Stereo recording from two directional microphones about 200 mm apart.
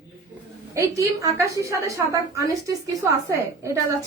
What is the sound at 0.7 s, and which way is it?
A woman's voice, 15° right (ahead or behind).